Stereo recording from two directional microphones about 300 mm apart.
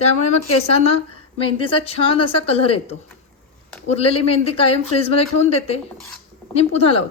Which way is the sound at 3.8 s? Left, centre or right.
Centre.